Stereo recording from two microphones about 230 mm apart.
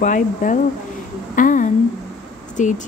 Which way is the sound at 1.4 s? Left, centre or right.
Left.